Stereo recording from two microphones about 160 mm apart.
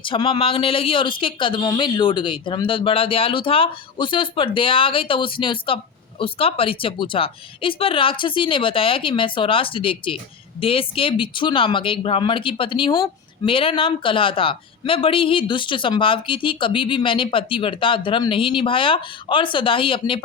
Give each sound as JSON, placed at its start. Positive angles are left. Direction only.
{"t": 0.0, "sound": "speech", "side_deg": 30}